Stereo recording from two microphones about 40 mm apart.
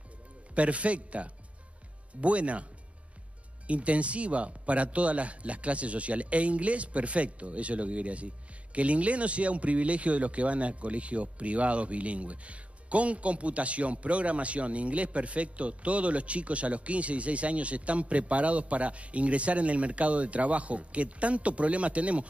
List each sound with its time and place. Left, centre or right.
0.6 s speech: right
3.6 s speech: right